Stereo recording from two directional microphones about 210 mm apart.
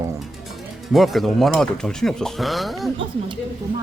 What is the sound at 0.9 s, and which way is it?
Speech, centre (ahead or behind).